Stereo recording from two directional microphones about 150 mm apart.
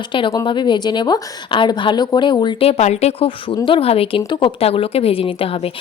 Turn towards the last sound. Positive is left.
turn(degrees=40)  # may be behind; listen again after turning